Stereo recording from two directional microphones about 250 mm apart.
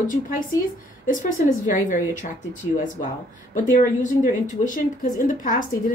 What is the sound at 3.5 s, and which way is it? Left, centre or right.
Speech, left.